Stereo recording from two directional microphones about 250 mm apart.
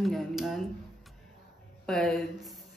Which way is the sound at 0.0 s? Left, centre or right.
Centre.